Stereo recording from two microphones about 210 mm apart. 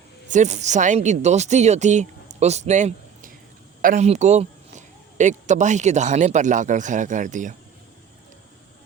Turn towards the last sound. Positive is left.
turn(degrees=-35)  # may be behind; listen again after turning